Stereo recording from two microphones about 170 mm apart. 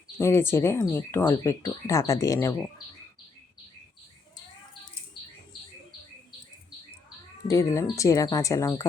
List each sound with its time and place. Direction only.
0.2 s speech: 15° left (ahead or behind)
7.4 s speech: 20° left (ahead or behind)